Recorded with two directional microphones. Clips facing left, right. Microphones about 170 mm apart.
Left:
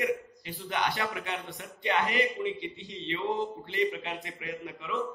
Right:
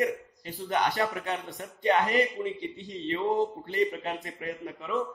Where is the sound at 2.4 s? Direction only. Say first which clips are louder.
Even; 45° right (ahead or behind).